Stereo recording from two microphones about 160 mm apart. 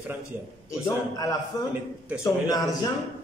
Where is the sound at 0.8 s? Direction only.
20° left (ahead or behind).